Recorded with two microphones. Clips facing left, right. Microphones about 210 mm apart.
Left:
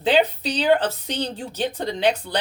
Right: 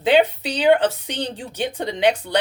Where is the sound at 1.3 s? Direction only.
15° right (ahead or behind).